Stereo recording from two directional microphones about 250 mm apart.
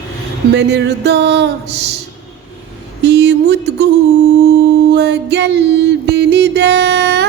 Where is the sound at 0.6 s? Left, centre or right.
Right.